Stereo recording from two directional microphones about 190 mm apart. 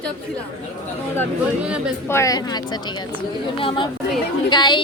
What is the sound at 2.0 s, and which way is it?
A woman's voice, 15° left (ahead or behind).